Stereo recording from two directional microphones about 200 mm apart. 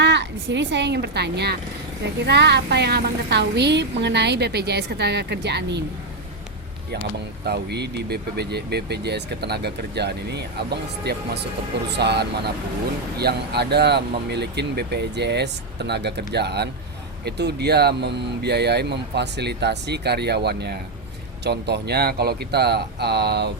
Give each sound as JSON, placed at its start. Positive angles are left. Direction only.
{"t": 0.0, "sound": "a woman's voice", "side_deg": -60}
{"t": 7.4, "sound": "a woman's voice", "side_deg": -55}